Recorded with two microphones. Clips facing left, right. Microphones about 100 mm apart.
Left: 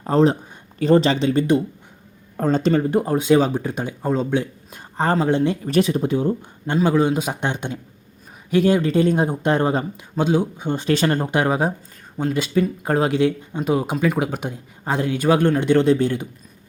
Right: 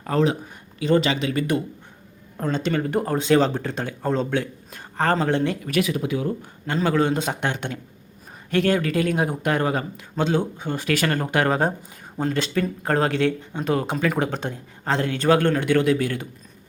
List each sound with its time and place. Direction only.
0.0 s speech: 30° left (ahead or behind)
2.4 s speech: 45° left (ahead or behind)
2.9 s speech: 15° left (ahead or behind)
5.6 s speech: 30° left (ahead or behind)
6.7 s speech: 15° left (ahead or behind)
10.2 s speech: 10° left (ahead or behind)